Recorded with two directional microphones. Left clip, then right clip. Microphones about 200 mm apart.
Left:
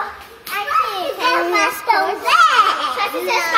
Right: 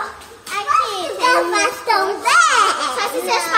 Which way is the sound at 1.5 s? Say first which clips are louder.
Left 1 dB; 65° right (ahead or behind).